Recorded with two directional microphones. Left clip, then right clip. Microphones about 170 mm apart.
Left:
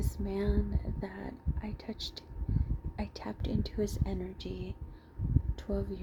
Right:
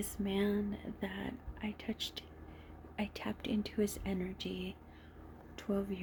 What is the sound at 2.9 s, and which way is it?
Speech, 5° right (ahead or behind).